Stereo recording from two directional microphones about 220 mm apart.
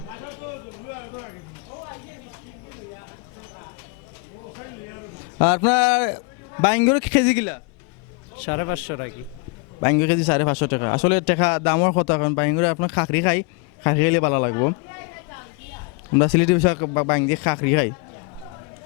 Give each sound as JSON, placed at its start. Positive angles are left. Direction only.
{"t": 5.4, "sound": "a man's voice", "side_deg": 15}
{"t": 16.1, "sound": "a man's voice", "side_deg": 15}